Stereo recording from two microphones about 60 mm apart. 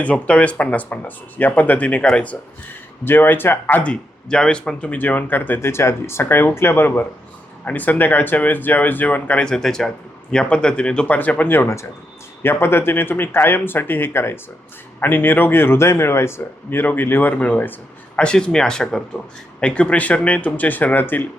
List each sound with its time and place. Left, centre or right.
0.0 s speech: left
3.8 s speech: centre
9.6 s a man's voice: centre
11.0 s speech: left
12.4 s speech: left
14.1 s speech: left
18.2 s speech: centre; by 21.2 s left